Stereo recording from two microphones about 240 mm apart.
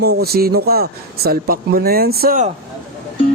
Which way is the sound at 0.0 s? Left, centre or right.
Right.